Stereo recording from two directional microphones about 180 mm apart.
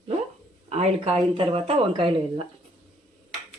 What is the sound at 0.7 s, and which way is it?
Speech, 35° right (ahead or behind).